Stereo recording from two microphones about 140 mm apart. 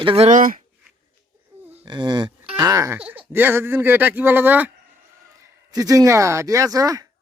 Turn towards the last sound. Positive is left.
turn(degrees=-25)  # may be behind; listen again after turning